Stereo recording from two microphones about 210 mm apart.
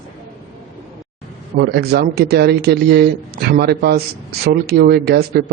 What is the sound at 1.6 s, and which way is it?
Speech, 50° right (ahead or behind).